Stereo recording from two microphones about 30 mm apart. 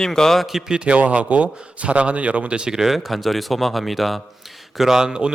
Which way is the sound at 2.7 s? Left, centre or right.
Centre.